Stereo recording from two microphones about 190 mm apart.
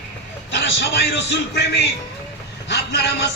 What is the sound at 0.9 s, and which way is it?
A man's voice, 60° left (ahead or behind).